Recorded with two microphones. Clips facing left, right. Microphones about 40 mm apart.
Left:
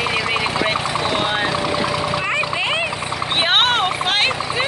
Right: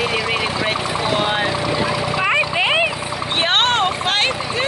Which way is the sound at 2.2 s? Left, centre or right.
Centre.